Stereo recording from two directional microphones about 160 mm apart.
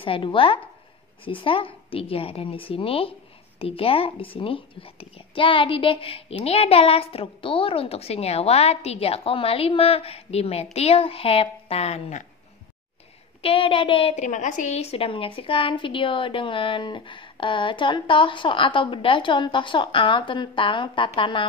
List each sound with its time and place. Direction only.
0.0 s a woman's voice: 30° left (ahead or behind)
13.4 s a woman's voice: 35° left (ahead or behind)
14.2 s a woman's voice: 50° left (ahead or behind); by 21.5 s 30° left (ahead or behind)